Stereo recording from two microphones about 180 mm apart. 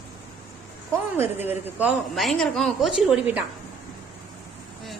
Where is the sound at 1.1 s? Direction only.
10° right (ahead or behind).